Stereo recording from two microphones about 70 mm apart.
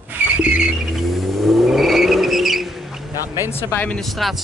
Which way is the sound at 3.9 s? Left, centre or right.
Centre.